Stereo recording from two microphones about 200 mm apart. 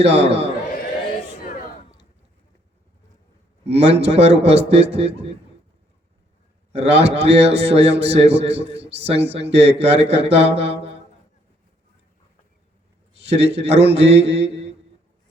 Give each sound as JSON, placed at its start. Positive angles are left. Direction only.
{"t": 0.0, "sound": "a man's voice", "side_deg": -30}
{"t": 3.7, "sound": "a man's voice", "side_deg": -30}
{"t": 6.7, "sound": "a man's voice", "side_deg": -30}
{"t": 13.2, "sound": "a man's voice", "side_deg": -30}